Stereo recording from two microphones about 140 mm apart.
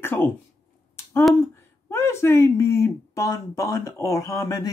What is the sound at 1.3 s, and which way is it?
Speech, 15° left (ahead or behind).